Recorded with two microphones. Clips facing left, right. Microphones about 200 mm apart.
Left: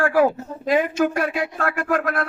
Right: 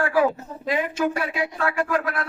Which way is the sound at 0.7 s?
45° left (ahead or behind).